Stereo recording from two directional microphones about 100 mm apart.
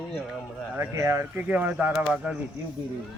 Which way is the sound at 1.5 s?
15° right (ahead or behind).